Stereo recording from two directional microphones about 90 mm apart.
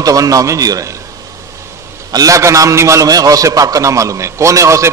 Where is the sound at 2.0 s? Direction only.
40° right (ahead or behind).